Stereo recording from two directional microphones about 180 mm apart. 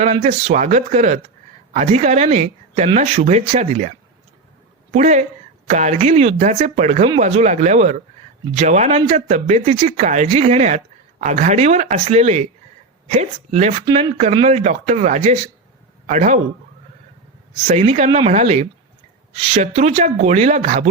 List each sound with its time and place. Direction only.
0.0 s speech: 40° right (ahead or behind)
13.8 s speech: 30° right (ahead or behind); by 16.4 s 45° right (ahead or behind)
17.7 s speech: 40° right (ahead or behind)